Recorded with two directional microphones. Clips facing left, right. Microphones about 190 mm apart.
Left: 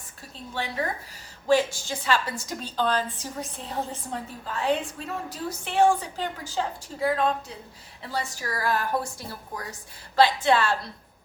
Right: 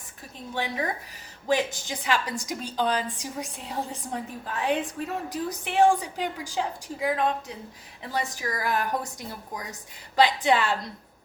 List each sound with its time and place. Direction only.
1.5 s a woman's voice: 15° right (ahead or behind)